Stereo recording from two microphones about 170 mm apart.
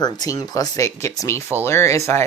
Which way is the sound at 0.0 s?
25° left (ahead or behind).